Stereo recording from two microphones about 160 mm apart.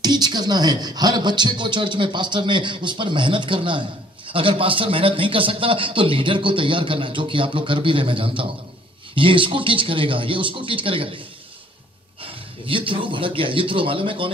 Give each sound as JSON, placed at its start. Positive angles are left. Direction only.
{"t": 0.0, "sound": "a man's voice", "side_deg": -25}
{"t": 12.2, "sound": "a man's voice", "side_deg": -35}